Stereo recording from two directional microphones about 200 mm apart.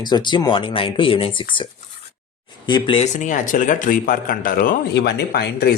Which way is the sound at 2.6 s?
25° left (ahead or behind).